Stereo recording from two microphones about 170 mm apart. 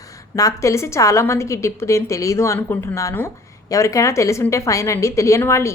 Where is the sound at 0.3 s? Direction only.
20° left (ahead or behind).